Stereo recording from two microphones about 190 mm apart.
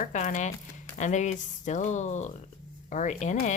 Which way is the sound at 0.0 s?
40° left (ahead or behind).